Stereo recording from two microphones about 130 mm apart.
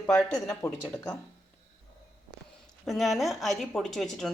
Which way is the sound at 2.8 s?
Centre (ahead or behind).